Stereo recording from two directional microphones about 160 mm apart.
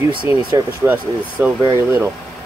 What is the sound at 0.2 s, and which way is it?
Speech, 10° right (ahead or behind).